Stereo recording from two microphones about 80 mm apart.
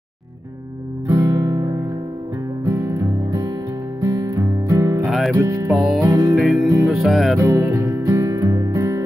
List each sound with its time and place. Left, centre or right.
1.0 s guitar: right
2.6 s music: right
5.7 s music: centre
5.9 s music: right
6.3 s music: centre
7.3 s music: right